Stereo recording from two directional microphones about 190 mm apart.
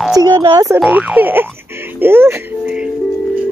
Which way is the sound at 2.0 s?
10° right (ahead or behind).